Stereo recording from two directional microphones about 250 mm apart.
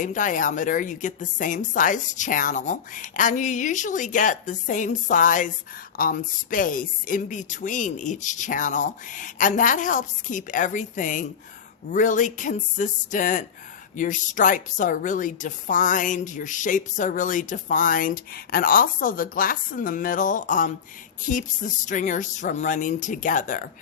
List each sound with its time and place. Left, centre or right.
0.0 s a woman's voice: left